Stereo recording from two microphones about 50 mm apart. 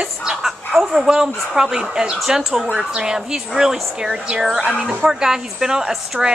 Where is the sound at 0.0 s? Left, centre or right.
Centre.